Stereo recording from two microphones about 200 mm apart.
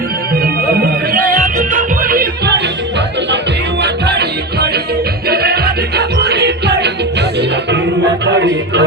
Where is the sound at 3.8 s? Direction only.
55° right (ahead or behind).